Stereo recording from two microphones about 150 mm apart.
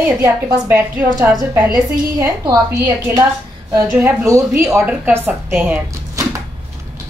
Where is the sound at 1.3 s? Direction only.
20° right (ahead or behind).